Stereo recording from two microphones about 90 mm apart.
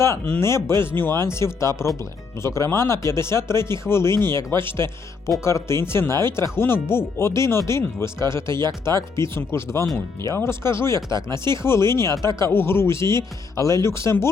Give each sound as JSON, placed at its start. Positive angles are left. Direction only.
{"t": 0.3, "sound": "speech", "side_deg": 30}
{"t": 11.1, "sound": "speech", "side_deg": -55}
{"t": 11.6, "sound": "speech", "side_deg": 30}